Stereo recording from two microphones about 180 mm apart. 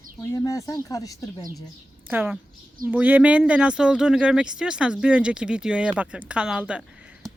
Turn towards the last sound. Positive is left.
turn(degrees=0)  # may be behind; listen again after turning